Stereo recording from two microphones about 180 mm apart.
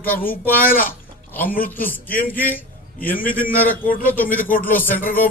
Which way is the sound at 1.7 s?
10° left (ahead or behind).